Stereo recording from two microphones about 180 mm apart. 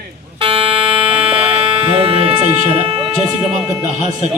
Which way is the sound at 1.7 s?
30° right (ahead or behind).